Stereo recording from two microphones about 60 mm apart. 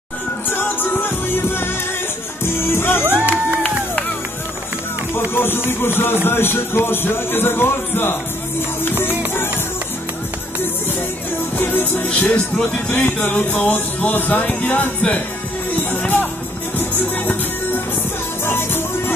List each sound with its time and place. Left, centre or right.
0.6 s music: left
3.1 s music: right
5.3 s music: left
11.5 s music: left
12.1 s speech: left
12.9 s music: left
18.4 s music: left